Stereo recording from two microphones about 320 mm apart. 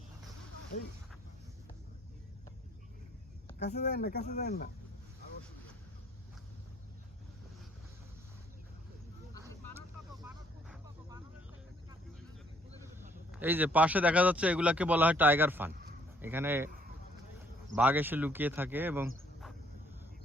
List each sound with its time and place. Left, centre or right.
3.7 s speech: left
10.2 s vehicle: centre
13.3 s speech: centre
17.7 s speech: centre